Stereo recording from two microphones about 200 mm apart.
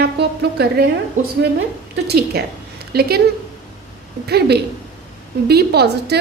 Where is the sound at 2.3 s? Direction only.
50° right (ahead or behind).